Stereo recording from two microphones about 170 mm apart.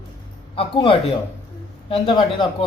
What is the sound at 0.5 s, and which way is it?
A man's voice, 30° left (ahead or behind).